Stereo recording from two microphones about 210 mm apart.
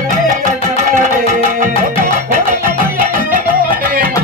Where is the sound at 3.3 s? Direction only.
45° right (ahead or behind).